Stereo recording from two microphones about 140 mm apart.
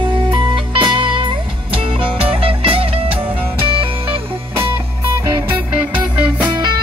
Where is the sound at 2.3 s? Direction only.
40° right (ahead or behind).